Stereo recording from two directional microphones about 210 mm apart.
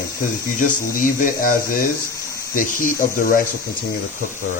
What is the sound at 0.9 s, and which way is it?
Speech, 40° left (ahead or behind).